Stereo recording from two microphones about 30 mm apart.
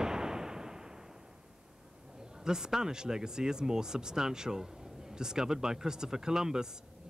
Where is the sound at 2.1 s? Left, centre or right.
Right.